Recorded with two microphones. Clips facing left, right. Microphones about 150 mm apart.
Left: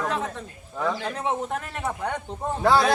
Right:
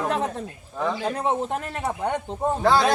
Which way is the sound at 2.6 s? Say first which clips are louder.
Even; centre (ahead or behind).